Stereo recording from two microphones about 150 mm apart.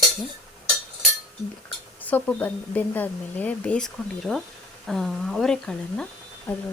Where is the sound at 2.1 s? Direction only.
10° left (ahead or behind).